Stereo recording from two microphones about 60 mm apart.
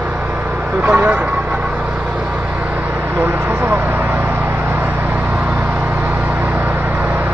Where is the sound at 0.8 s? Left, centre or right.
Right.